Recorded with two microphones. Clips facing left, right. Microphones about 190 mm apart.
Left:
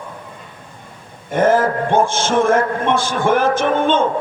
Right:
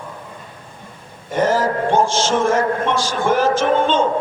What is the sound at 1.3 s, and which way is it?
A man's voice, 55° left (ahead or behind).